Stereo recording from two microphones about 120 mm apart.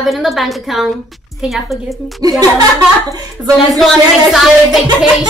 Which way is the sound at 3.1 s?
30° right (ahead or behind).